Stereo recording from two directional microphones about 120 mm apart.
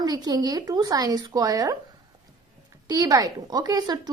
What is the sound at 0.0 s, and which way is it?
A woman's voice, 35° right (ahead or behind).